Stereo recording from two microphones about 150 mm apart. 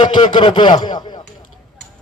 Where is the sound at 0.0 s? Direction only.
30° left (ahead or behind).